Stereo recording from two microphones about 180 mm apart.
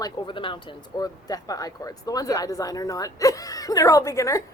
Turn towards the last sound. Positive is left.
turn(degrees=15)  # may be behind; listen again after turning